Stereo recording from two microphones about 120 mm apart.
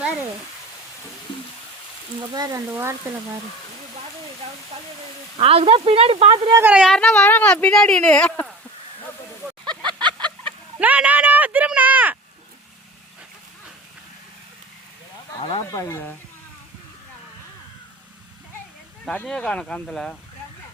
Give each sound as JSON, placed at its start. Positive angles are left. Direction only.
{"t": 2.3, "sound": "speech", "side_deg": -30}
{"t": 5.4, "sound": "speech", "side_deg": -55}
{"t": 6.3, "sound": "speech", "side_deg": -40}
{"t": 6.6, "sound": "speech", "side_deg": -15}
{"t": 6.8, "sound": "speech", "side_deg": 5}
{"t": 9.6, "sound": "a sound", "side_deg": -40}
{"t": 10.8, "sound": "a sound", "side_deg": -10}
{"t": 15.4, "sound": "speech", "side_deg": 50}
{"t": 15.7, "sound": "speech", "side_deg": 25}
{"t": 19.0, "sound": "speech", "side_deg": 10}